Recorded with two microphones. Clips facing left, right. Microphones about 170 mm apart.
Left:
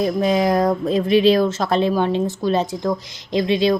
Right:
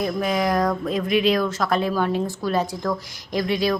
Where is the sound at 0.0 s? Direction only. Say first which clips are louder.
Left 5 dB; 25° left (ahead or behind).